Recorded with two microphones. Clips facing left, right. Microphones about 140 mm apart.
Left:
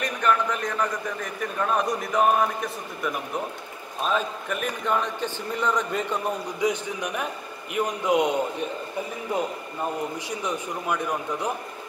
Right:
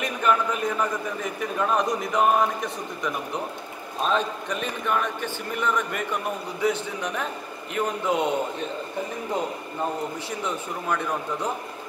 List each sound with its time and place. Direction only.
0.0 s a man's voice: 5° right (ahead or behind)
4.8 s a man's voice: 20° left (ahead or behind)
10.4 s speech: 15° left (ahead or behind)